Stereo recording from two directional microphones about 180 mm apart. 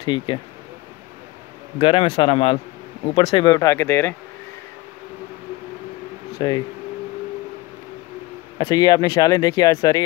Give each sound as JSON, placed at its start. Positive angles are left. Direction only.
{"t": 0.0, "sound": "speech", "side_deg": 25}
{"t": 1.8, "sound": "a man's voice", "side_deg": 30}
{"t": 6.3, "sound": "speech", "side_deg": 25}
{"t": 8.5, "sound": "speech", "side_deg": 20}